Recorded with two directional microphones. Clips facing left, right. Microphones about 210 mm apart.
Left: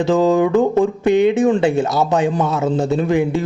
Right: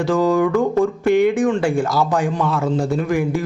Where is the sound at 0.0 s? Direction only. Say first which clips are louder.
Left 2 dB; 20° left (ahead or behind).